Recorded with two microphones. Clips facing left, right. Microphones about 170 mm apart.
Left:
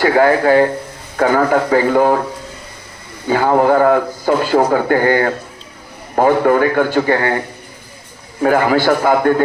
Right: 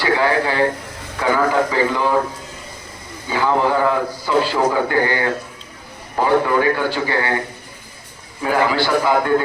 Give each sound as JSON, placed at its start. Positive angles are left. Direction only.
{"t": 0.0, "sound": "a man's voice", "side_deg": 50}
{"t": 3.2, "sound": "a man's voice", "side_deg": 50}
{"t": 8.4, "sound": "a man's voice", "side_deg": 50}